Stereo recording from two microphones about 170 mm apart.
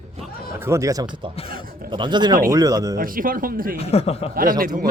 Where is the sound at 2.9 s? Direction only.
55° right (ahead or behind).